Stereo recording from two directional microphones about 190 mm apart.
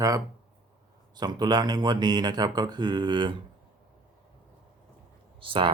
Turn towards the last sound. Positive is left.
turn(degrees=-25)  # may be behind; listen again after turning